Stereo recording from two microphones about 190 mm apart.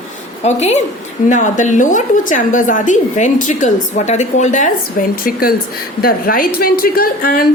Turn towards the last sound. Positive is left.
turn(degrees=50)  # may be behind; listen again after turning